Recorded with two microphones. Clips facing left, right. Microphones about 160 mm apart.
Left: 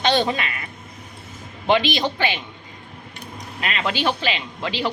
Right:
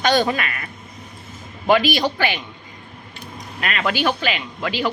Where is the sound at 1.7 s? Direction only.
25° left (ahead or behind).